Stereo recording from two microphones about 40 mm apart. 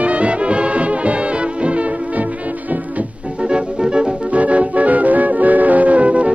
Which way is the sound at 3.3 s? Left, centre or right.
Right.